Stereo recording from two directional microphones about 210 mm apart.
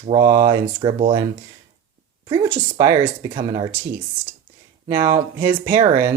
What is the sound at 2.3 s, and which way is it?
Speech, 10° right (ahead or behind).